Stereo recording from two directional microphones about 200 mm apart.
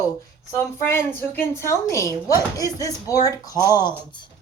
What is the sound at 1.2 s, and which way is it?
Speech, 10° left (ahead or behind).